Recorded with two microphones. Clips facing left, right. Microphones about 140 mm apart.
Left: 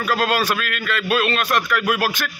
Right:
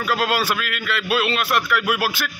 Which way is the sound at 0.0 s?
15° right (ahead or behind).